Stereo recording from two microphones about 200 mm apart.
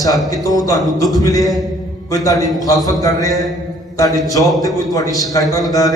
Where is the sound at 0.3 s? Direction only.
15° left (ahead or behind).